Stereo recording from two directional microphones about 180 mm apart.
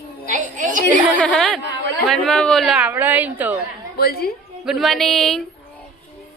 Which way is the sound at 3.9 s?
60° left (ahead or behind).